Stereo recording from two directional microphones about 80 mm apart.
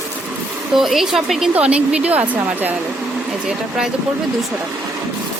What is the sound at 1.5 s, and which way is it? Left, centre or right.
Speech, centre.